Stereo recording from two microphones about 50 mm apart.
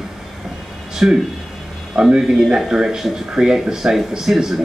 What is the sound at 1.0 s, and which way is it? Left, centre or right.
Speech, centre.